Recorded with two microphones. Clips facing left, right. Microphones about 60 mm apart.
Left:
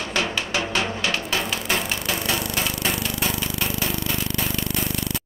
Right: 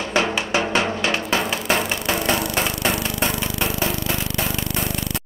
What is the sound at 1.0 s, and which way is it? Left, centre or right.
Music, right.